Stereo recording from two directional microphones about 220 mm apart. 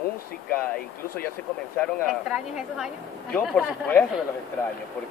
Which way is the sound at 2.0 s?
5° right (ahead or behind).